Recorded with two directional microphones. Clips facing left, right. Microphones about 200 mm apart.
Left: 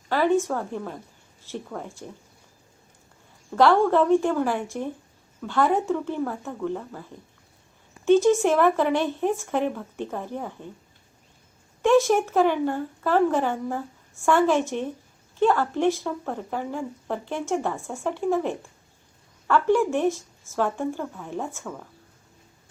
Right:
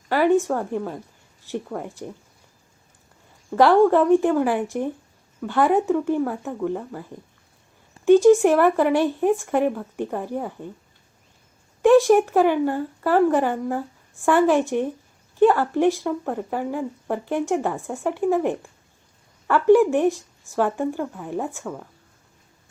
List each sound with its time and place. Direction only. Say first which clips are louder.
0.1 s speech: right 3 dB; 15° right (ahead or behind)
3.6 s speech: right 3 dB; 15° right (ahead or behind)
8.0 s speech: right 5 dB; 15° right (ahead or behind)
11.8 s speech: right 5 dB; 15° right (ahead or behind)